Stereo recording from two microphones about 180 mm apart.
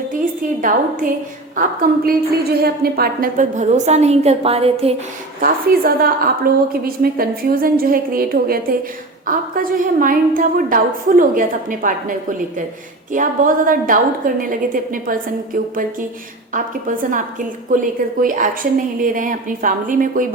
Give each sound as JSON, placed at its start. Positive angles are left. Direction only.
{"t": 0.6, "sound": "a woman's voice", "side_deg": -50}
{"t": 5.4, "sound": "a woman's voice", "side_deg": -55}
{"t": 13.1, "sound": "a woman's voice", "side_deg": -50}